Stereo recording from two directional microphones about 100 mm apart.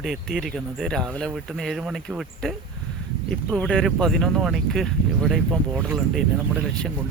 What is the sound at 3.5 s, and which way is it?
Speech, 5° left (ahead or behind).